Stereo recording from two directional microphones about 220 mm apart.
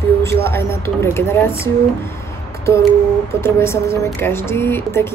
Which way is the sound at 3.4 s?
10° left (ahead or behind).